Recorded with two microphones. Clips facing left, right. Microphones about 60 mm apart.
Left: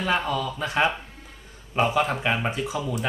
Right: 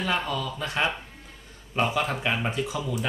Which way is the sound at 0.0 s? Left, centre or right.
Centre.